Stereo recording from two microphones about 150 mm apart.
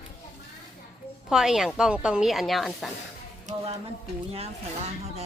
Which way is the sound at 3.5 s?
55° right (ahead or behind).